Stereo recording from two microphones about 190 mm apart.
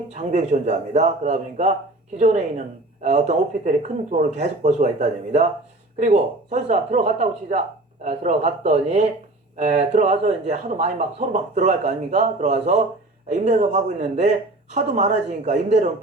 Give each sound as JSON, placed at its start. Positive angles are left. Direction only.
{"t": 0.1, "sound": "a woman's voice", "side_deg": -35}